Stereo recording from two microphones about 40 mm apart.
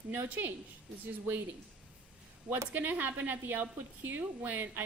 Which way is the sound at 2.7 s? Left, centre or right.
Right.